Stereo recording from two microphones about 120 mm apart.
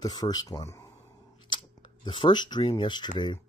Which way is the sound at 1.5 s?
45° left (ahead or behind).